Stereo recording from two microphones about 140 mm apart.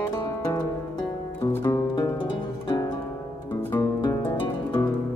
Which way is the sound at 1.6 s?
30° left (ahead or behind).